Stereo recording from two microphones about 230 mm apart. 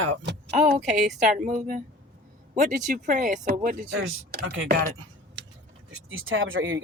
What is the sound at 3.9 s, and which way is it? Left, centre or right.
Speech, right.